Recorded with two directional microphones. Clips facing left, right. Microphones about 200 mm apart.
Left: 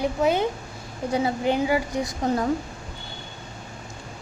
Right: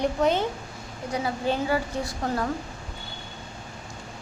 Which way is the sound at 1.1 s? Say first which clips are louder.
Left 4 dB; 20° left (ahead or behind).